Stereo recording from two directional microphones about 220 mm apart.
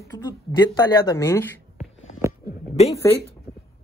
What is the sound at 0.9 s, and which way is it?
Speech, 15° left (ahead or behind).